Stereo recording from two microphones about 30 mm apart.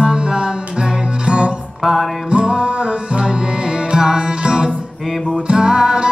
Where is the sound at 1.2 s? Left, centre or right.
Right.